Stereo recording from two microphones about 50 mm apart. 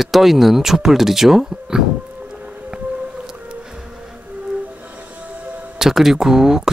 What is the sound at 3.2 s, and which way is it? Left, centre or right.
Music, centre.